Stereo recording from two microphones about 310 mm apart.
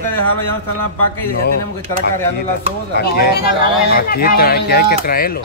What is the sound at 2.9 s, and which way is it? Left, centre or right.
Speech, left.